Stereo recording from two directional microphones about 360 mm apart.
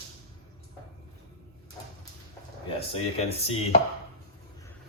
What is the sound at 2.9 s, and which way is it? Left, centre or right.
Speech, centre.